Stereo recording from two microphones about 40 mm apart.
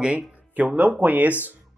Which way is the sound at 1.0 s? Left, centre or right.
Right.